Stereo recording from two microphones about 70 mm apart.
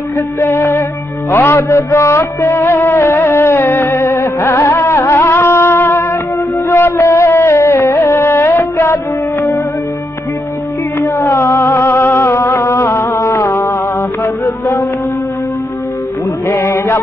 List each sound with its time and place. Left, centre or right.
0.4 s music: left
7.0 s music: left
11.0 s music: left
16.6 s chant: left